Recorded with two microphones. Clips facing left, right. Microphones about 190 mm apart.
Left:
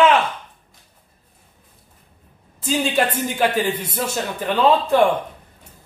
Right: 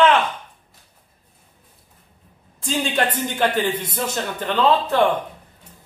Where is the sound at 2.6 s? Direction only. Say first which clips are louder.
Left 2 dB; 5° left (ahead or behind).